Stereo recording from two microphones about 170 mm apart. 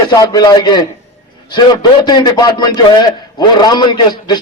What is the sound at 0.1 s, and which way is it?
A man's voice, 25° left (ahead or behind).